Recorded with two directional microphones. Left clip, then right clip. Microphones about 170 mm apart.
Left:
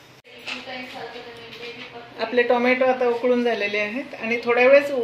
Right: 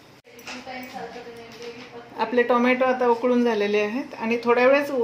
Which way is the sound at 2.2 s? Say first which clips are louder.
Left 1 dB; 65° right (ahead or behind).